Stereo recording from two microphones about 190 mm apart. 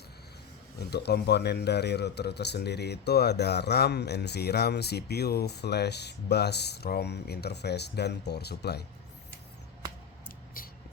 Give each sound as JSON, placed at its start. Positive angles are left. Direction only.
{"t": 0.8, "sound": "speech", "side_deg": 60}